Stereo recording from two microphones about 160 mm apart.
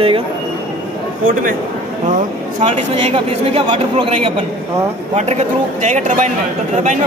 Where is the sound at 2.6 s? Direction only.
40° right (ahead or behind).